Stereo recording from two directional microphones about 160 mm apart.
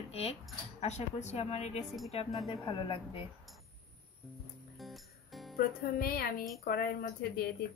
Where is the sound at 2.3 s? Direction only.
30° left (ahead or behind).